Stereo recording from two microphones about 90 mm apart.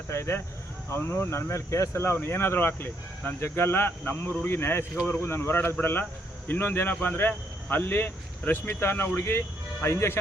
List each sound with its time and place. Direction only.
0.1 s speech: 30° left (ahead or behind)